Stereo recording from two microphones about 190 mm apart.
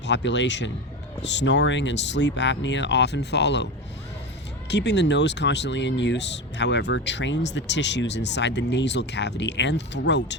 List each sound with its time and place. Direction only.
0.0 s speech: 70° left (ahead or behind)
4.7 s speech: 65° left (ahead or behind)